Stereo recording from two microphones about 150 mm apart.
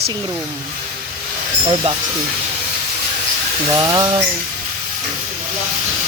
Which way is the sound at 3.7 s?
20° right (ahead or behind).